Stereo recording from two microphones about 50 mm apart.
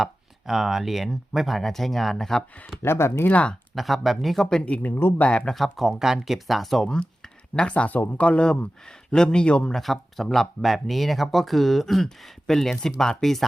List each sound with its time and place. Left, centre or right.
0.0 s speech: centre
2.8 s speech: left
3.2 s speech: left
3.8 s speech: centre
4.4 s speech: left
4.9 s speech: left
5.5 s speech: centre
6.8 s speech: centre
9.7 s speech: centre